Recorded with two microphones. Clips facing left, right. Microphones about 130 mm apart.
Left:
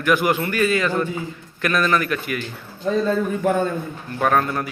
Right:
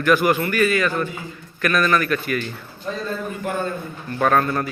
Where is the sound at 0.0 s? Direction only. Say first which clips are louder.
Right 1 dB; 15° left (ahead or behind).